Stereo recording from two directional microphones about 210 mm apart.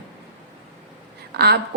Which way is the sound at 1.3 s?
50° right (ahead or behind).